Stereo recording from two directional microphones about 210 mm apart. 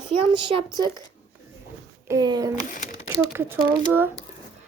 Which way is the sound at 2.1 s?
20° right (ahead or behind).